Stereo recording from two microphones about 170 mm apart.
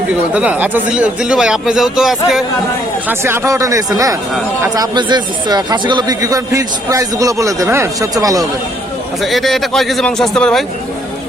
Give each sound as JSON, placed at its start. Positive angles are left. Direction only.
{"t": 0.3, "sound": "speech", "side_deg": -10}
{"t": 3.1, "sound": "speech", "side_deg": -15}
{"t": 9.2, "sound": "speech", "side_deg": 0}